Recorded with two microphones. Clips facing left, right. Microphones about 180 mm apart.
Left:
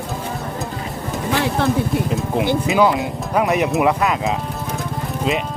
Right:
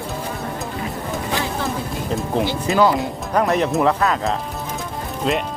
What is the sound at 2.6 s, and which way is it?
Speech, 5° left (ahead or behind).